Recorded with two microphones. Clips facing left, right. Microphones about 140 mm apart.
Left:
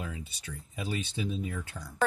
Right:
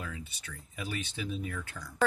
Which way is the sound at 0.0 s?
25° left (ahead or behind).